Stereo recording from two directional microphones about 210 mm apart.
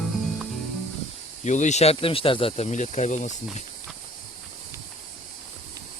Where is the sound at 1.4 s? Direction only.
35° left (ahead or behind).